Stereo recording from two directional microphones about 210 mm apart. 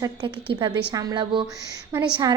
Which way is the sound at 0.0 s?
20° right (ahead or behind).